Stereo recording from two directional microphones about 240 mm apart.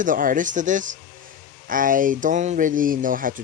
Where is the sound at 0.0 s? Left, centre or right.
Right.